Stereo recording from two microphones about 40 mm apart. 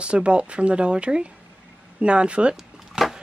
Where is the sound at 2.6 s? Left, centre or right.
Centre.